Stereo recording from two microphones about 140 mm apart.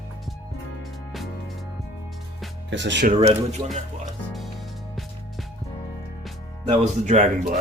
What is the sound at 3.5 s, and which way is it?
Speech, 50° right (ahead or behind).